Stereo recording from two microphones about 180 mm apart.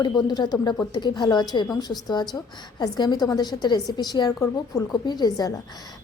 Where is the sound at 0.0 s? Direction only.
25° left (ahead or behind).